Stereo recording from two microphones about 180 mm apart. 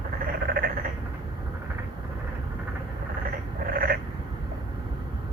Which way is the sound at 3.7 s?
55° right (ahead or behind).